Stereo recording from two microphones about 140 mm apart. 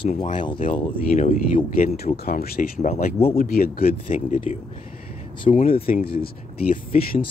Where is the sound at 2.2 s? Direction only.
90° left.